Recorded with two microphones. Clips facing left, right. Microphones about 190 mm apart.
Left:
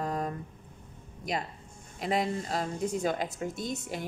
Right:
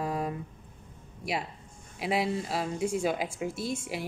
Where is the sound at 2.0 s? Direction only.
5° right (ahead or behind).